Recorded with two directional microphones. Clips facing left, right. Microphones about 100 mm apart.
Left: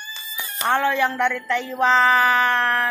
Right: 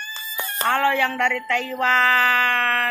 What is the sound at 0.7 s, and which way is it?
Speech, 20° left (ahead or behind).